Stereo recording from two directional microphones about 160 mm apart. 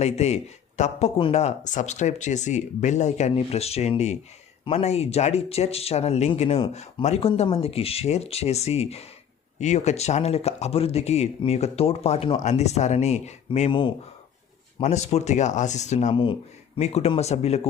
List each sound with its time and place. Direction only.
0.0 s speech: 45° left (ahead or behind)
14.8 s speech: 45° left (ahead or behind)
16.1 s speech: 30° left (ahead or behind)